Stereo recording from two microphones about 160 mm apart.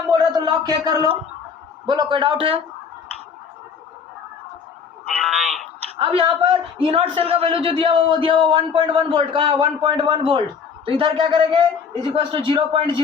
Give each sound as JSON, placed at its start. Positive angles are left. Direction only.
{"t": 0.1, "sound": "a sound", "side_deg": -25}
{"t": 1.9, "sound": "a man's voice", "side_deg": -25}
{"t": 5.0, "sound": "a man's voice", "side_deg": 0}
{"t": 6.0, "sound": "a man's voice", "side_deg": -35}